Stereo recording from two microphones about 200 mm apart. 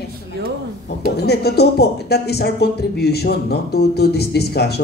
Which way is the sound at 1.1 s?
55° left (ahead or behind).